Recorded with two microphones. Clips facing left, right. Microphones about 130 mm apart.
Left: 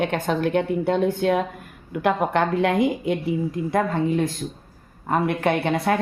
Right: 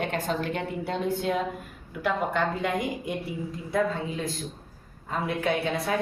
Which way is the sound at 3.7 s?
60° left (ahead or behind).